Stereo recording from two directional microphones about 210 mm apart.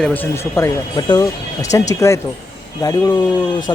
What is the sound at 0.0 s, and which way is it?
Speech, 10° left (ahead or behind).